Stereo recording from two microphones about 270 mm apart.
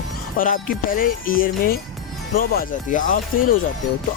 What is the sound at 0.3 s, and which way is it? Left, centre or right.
Speech, left.